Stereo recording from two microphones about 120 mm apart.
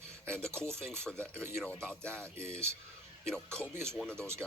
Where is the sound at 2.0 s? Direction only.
20° right (ahead or behind).